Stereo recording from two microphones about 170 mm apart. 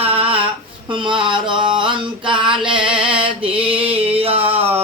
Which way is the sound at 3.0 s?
30° right (ahead or behind).